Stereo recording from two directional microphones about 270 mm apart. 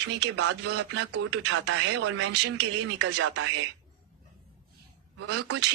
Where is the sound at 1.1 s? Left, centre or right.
Right.